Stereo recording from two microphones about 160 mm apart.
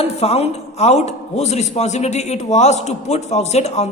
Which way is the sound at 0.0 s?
40° left (ahead or behind).